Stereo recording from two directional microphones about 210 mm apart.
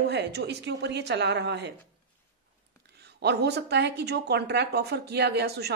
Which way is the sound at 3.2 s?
50° right (ahead or behind).